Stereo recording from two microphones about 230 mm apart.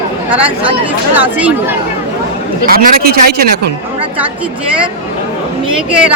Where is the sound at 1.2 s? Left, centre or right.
Centre.